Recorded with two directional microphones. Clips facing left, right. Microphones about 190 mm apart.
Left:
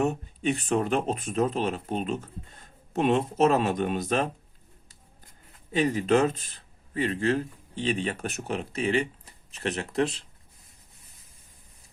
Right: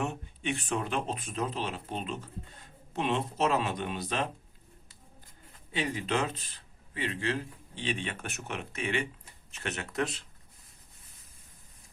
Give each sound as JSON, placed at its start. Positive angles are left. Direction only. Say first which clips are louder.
{"t": 0.0, "sound": "speech", "louder": "left 8 dB", "side_deg": 40}
{"t": 5.7, "sound": "speech", "louder": "left 9 dB", "side_deg": 45}